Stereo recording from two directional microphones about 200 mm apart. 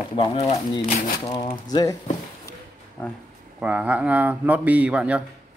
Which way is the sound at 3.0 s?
5° left (ahead or behind).